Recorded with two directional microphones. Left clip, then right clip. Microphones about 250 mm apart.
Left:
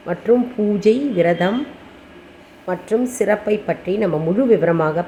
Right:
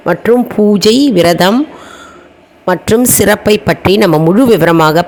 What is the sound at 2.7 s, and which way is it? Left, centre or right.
Speech, right.